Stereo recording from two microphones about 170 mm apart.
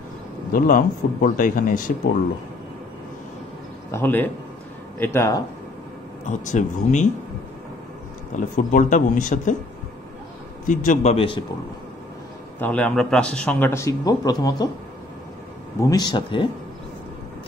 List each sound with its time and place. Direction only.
0.5 s speech: 55° left (ahead or behind)
3.9 s a man's voice: 10° left (ahead or behind)
6.2 s speech: 45° left (ahead or behind)
8.5 s speech: 50° left (ahead or behind)
10.7 s a man's voice: 50° left (ahead or behind); by 11.4 s 30° left (ahead or behind)
12.5 s a man's voice: 10° left (ahead or behind)
15.9 s speech: 25° left (ahead or behind)